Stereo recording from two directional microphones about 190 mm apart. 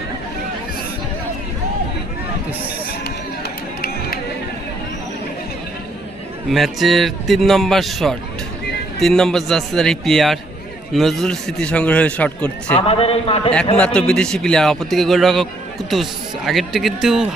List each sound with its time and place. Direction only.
3.0 s music: 55° left (ahead or behind)
6.5 s a man's voice: centre (ahead or behind)
12.7 s a man's voice: 30° left (ahead or behind)
13.7 s a man's voice: 5° left (ahead or behind)